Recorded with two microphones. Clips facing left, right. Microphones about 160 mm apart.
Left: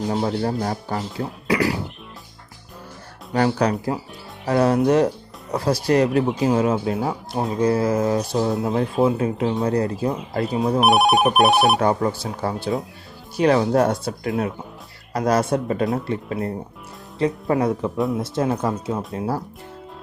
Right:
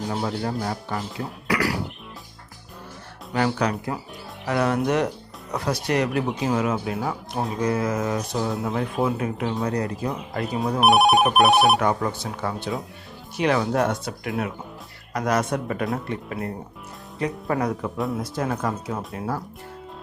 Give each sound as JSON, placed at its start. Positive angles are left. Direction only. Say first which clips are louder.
{"t": 0.1, "sound": "speech", "louder": "left 4 dB", "side_deg": 35}
{"t": 1.5, "sound": "speech", "louder": "left 3 dB", "side_deg": 25}
{"t": 3.3, "sound": "speech", "louder": "left 4 dB", "side_deg": 35}
{"t": 10.8, "sound": "telephone bell ringing", "louder": "even", "side_deg": 0}
{"t": 11.8, "sound": "speech", "louder": "left 3 dB", "side_deg": 30}